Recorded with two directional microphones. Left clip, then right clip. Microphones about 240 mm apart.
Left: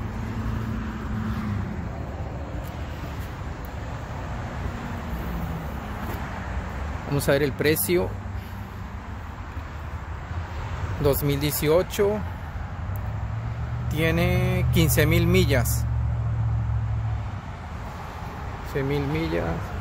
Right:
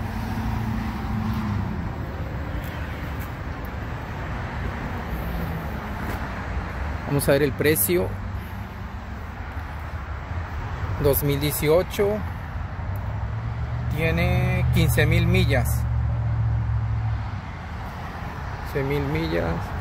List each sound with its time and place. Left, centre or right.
7.1 s speech: centre
11.0 s speech: centre
13.9 s speech: left
18.8 s speech: centre